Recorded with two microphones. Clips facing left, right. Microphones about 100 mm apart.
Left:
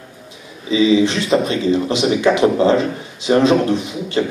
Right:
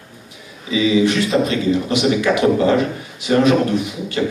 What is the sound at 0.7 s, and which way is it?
Speech, 25° left (ahead or behind).